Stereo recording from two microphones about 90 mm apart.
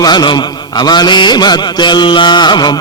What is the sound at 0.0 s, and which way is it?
A man's voice, 55° left (ahead or behind).